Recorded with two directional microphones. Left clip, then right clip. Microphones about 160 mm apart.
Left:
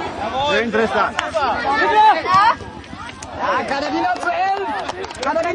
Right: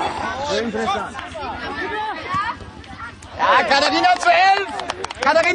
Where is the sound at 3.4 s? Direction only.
35° right (ahead or behind).